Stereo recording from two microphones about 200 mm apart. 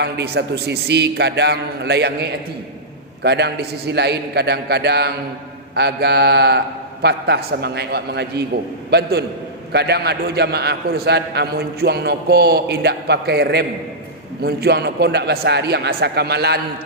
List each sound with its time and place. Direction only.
0.0 s a man's voice: 55° right (ahead or behind)